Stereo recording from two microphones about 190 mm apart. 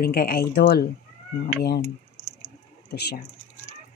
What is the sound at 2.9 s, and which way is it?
Speech, 60° left (ahead or behind).